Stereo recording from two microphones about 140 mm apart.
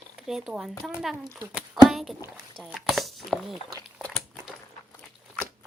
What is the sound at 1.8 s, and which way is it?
Speech, centre (ahead or behind).